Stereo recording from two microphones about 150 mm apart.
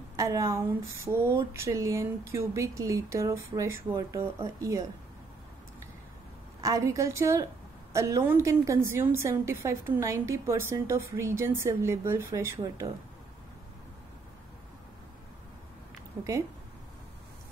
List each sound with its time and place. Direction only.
0.1 s a woman's voice: 20° right (ahead or behind)
6.6 s a woman's voice: 20° right (ahead or behind)
16.1 s speech: 10° right (ahead or behind)